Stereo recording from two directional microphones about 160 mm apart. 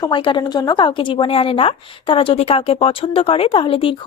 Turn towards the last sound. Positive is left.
turn(degrees=35)  # may be behind; listen again after turning